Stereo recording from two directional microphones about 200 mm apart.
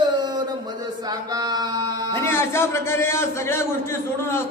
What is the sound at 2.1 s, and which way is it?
A man's voice, 15° left (ahead or behind).